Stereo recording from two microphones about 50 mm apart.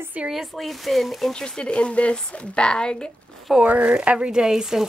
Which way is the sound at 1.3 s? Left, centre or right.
Centre.